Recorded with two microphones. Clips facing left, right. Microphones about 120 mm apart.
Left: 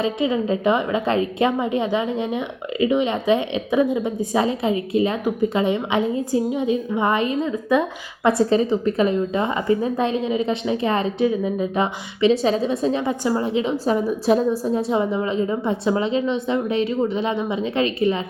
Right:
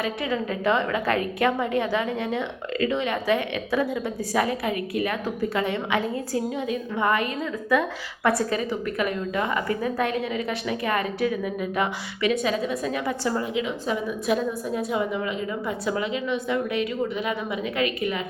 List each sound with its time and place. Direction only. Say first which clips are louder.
0.0 s a woman's voice: left 6 dB; 20° left (ahead or behind)